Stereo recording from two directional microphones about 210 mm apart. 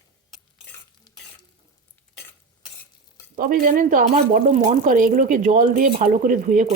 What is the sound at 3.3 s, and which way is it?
Speech, 40° right (ahead or behind).